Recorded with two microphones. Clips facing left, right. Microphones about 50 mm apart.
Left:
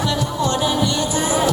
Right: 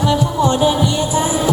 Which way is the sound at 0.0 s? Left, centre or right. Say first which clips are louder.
Right 5 dB; centre.